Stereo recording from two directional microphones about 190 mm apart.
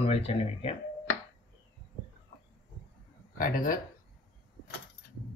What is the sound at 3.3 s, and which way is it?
Speech, 50° left (ahead or behind).